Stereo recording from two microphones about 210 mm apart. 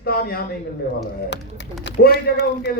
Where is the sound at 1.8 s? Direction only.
50° left (ahead or behind).